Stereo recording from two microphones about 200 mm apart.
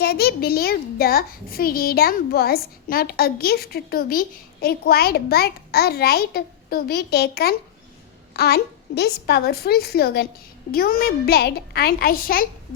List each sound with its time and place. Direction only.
0.0 s a child's voice: 50° left (ahead or behind)